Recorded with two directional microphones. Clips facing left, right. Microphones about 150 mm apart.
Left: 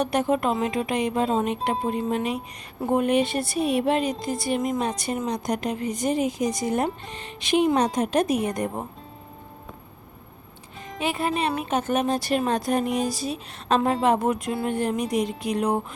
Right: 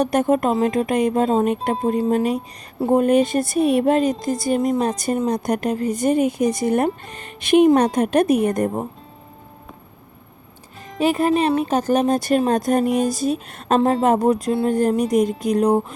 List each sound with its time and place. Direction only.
0.0 s a woman's voice: 45° right (ahead or behind)
11.0 s a woman's voice: 40° right (ahead or behind)
12.8 s speech: centre (ahead or behind)
13.1 s a woman's voice: 50° right (ahead or behind)